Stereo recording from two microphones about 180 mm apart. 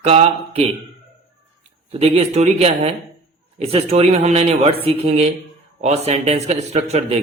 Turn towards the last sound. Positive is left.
turn(degrees=-35)  # may be behind; listen again after turning